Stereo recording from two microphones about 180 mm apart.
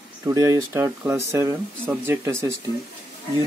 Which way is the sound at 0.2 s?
20° right (ahead or behind).